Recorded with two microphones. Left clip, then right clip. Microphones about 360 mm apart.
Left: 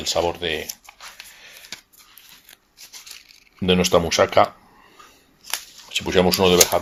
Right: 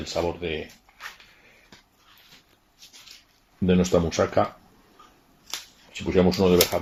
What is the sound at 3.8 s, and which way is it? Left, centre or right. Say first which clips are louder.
Speech: left 7 dB; left.